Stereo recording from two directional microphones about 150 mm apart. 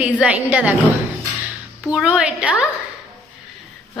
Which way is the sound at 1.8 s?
5° right (ahead or behind).